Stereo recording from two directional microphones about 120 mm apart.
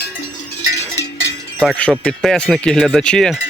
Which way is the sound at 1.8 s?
10° left (ahead or behind).